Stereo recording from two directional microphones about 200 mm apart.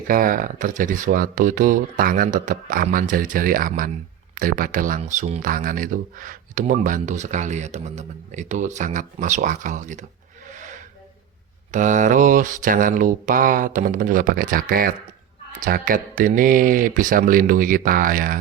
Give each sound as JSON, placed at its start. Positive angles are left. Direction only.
{"t": 0.1, "sound": "speech", "side_deg": -45}